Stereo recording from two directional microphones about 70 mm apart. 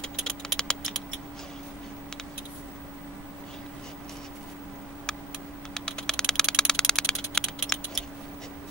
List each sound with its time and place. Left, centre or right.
0.5 s typing: centre
5.8 s typing: centre